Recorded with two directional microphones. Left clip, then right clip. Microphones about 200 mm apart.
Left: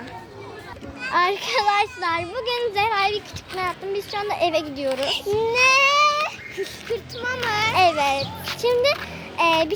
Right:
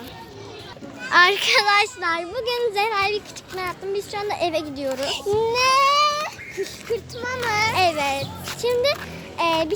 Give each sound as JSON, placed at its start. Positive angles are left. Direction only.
{"t": 1.1, "sound": "speech", "side_deg": 5}
{"t": 5.3, "sound": "speech", "side_deg": -20}
{"t": 7.7, "sound": "speech", "side_deg": 10}